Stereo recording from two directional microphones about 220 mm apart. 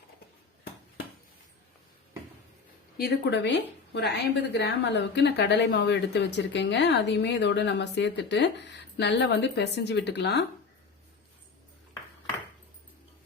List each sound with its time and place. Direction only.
3.0 s a woman's voice: 50° left (ahead or behind)